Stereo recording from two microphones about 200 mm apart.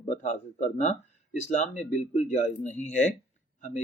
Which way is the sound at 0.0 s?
35° left (ahead or behind).